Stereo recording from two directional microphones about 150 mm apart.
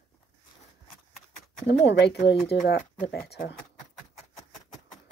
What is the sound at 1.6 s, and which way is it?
Speech, 90° left.